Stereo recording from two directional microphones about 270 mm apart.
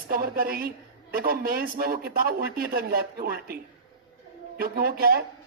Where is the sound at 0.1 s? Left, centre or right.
Right.